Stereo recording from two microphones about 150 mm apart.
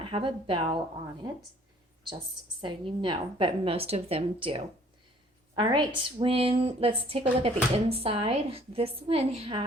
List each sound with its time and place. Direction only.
0.0 s a woman's voice: 35° right (ahead or behind)
2.6 s a woman's voice: 35° right (ahead or behind)